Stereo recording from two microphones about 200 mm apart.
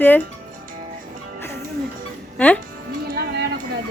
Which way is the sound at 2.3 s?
5° left (ahead or behind).